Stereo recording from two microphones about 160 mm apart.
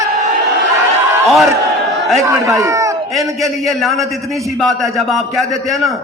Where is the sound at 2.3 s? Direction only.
20° right (ahead or behind).